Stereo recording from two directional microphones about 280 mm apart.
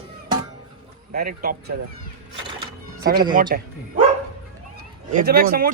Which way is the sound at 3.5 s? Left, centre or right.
Right.